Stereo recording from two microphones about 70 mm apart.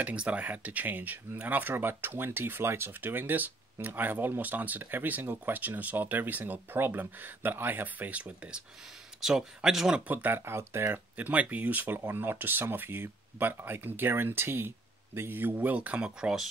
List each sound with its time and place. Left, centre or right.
0.0 s speech: centre
10.0 s speech: right
10.4 s speech: right
11.1 s speech: right